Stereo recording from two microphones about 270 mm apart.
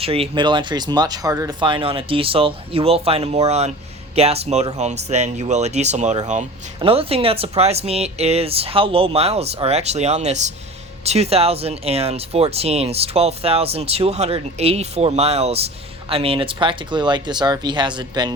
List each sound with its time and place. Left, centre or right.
0.0 s speech: right